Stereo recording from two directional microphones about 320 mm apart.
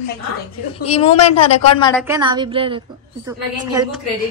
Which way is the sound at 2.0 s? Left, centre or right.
Centre.